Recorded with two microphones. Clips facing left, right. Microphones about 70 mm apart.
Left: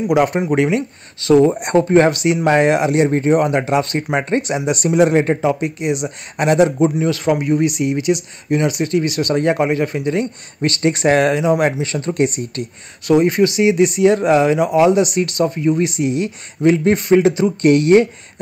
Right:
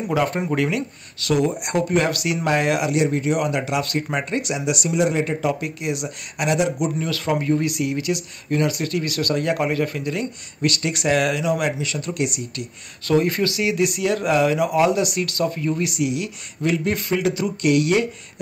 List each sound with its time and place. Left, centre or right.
0.1 s speech: left
5.4 s speech: left
6.3 s speech: left
7.0 s speech: left
13.0 s speech: centre
17.6 s speech: left